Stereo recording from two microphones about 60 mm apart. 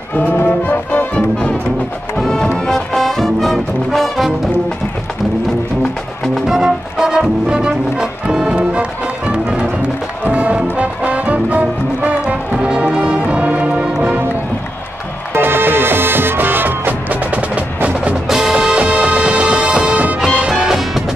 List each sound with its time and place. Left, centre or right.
0.1 s music: left
2.1 s music: centre
5.8 s music: centre
6.4 s music: centre
15.3 s music: right
18.3 s music: centre